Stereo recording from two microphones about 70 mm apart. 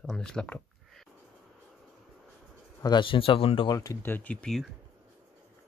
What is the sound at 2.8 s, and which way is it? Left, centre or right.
Speech, left.